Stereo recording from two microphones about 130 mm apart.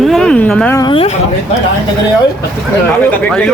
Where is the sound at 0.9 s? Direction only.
45° left (ahead or behind).